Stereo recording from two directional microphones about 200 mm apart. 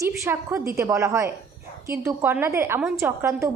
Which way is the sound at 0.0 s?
15° right (ahead or behind).